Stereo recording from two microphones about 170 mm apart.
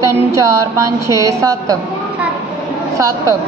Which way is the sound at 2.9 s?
20° right (ahead or behind).